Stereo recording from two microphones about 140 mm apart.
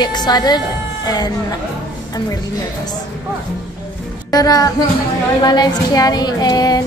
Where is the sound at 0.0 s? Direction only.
30° left (ahead or behind).